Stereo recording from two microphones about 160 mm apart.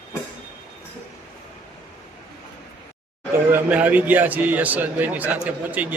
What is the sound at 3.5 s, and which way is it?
A man's voice, 10° right (ahead or behind).